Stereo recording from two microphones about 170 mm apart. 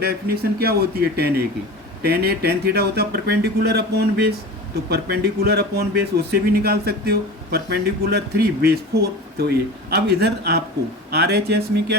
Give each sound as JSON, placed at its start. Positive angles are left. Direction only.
{"t": 0.6, "sound": "speech", "side_deg": -65}